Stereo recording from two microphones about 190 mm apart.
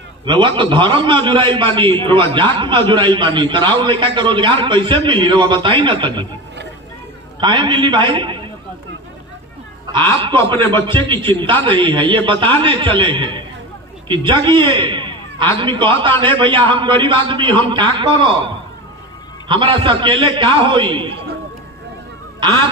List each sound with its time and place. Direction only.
0.2 s a man's voice: 25° right (ahead or behind)
7.3 s a man's voice: 25° right (ahead or behind)
9.8 s a man's voice: 25° right (ahead or behind)